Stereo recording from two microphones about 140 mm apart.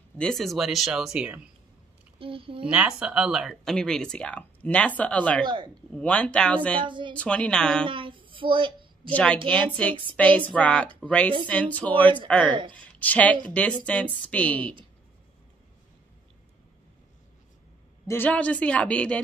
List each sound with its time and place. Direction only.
0.2 s speech: centre (ahead or behind)
2.1 s a child's voice: 40° right (ahead or behind)
2.6 s a woman's voice: 5° right (ahead or behind); by 6.8 s 10° left (ahead or behind)
6.8 s speech: 35° right (ahead or behind)
7.2 s a woman's voice: 10° left (ahead or behind)
7.8 s a sound: 35° right (ahead or behind)
9.1 s a woman's voice: 10° left (ahead or behind)
18.0 s a woman's voice: 15° left (ahead or behind)